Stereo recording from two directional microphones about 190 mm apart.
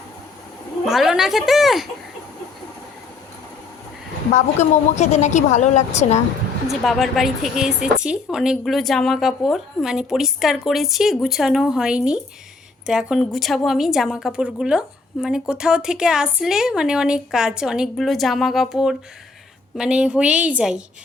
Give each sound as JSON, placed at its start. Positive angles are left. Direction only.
{"t": 0.9, "sound": "a woman's voice", "side_deg": 0}
{"t": 4.9, "sound": "a woman's voice", "side_deg": 35}
{"t": 6.7, "sound": "a woman's voice", "side_deg": 0}